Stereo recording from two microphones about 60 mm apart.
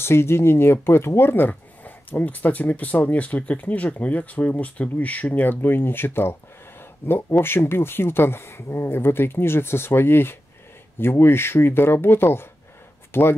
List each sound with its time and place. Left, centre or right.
0.0 s speech: left